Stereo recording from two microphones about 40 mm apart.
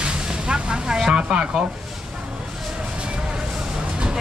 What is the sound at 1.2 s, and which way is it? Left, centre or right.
Speech, right.